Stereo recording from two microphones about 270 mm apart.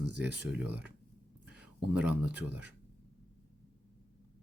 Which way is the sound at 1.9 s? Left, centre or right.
Centre.